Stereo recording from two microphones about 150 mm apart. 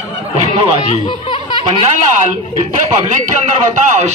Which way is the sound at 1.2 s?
35° left (ahead or behind).